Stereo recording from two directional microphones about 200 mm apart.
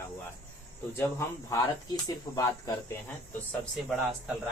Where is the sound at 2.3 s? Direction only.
15° left (ahead or behind).